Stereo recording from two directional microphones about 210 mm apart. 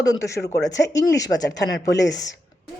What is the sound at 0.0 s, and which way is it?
Speech, 15° left (ahead or behind).